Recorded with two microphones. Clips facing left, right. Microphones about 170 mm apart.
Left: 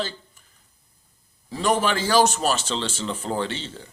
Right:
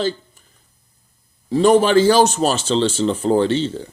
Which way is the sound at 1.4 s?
30° right (ahead or behind).